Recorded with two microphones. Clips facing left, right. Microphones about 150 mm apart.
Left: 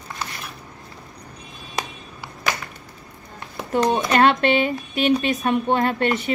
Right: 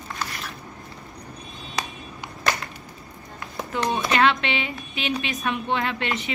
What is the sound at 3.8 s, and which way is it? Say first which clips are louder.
Speech: left 3 dB; 45° left (ahead or behind).